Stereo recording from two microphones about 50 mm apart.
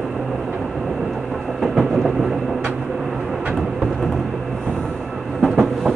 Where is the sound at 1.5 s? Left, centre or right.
Centre.